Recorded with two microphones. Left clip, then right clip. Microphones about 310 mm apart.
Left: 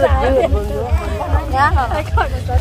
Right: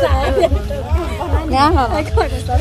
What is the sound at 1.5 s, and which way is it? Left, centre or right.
Speech, right.